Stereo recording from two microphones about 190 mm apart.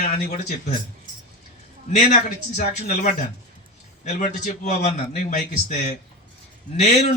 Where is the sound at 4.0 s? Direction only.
40° left (ahead or behind).